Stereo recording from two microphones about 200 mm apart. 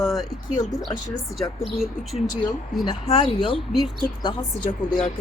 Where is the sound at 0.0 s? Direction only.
Centre (ahead or behind).